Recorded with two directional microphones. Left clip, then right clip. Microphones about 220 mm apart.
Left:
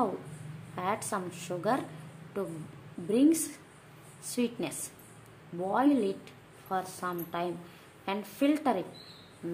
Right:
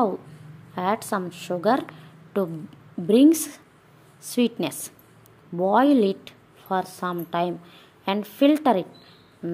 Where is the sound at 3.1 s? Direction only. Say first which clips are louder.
Right 9 dB; 40° right (ahead or behind).